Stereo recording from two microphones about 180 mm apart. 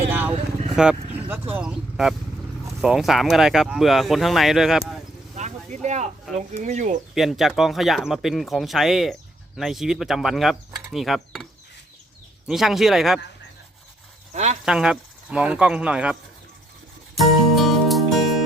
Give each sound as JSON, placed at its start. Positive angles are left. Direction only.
{"t": 0.1, "sound": "vehicle", "side_deg": -10}
{"t": 0.8, "sound": "speech", "side_deg": -10}
{"t": 5.3, "sound": "a sound", "side_deg": -40}
{"t": 6.3, "sound": "speech", "side_deg": -40}
{"t": 7.1, "sound": "speech", "side_deg": 0}
{"t": 12.5, "sound": "speech", "side_deg": 0}
{"t": 14.3, "sound": "speech", "side_deg": -40}
{"t": 14.6, "sound": "speech", "side_deg": -5}
{"t": 17.2, "sound": "music", "side_deg": 0}